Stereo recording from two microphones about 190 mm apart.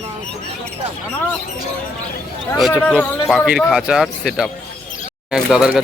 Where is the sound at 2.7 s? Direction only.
10° left (ahead or behind).